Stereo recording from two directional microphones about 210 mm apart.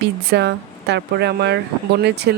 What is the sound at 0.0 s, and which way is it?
A woman's voice, 50° right (ahead or behind).